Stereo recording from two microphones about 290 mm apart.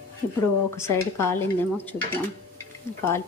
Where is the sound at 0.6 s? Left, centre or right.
Centre.